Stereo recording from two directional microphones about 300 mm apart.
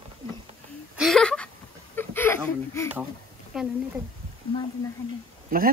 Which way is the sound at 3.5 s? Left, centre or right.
Centre.